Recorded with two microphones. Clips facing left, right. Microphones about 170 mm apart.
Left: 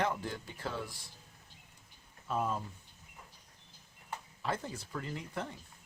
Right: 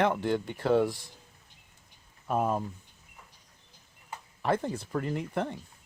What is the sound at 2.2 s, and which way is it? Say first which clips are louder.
Speech: right 6 dB; 55° right (ahead or behind).